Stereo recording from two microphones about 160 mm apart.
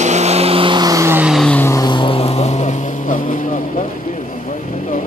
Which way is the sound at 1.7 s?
25° left (ahead or behind).